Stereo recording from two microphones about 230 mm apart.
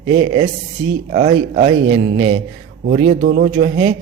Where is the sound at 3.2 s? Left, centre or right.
Right.